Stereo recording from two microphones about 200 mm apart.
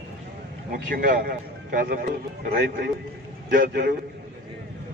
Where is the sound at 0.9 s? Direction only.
45° right (ahead or behind).